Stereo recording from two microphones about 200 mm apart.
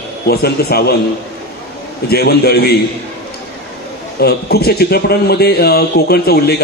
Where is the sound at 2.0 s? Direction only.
50° left (ahead or behind).